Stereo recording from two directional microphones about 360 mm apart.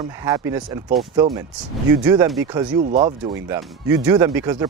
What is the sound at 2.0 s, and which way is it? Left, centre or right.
Speech, centre.